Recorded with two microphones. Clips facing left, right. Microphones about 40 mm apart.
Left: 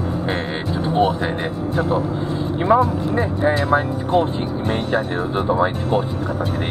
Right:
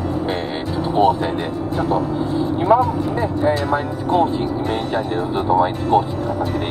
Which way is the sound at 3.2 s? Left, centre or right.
Centre.